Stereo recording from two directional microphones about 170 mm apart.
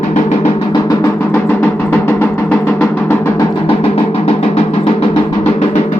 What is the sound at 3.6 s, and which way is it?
Music, 35° left (ahead or behind).